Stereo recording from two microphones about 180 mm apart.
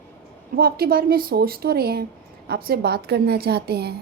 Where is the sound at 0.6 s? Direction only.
55° right (ahead or behind).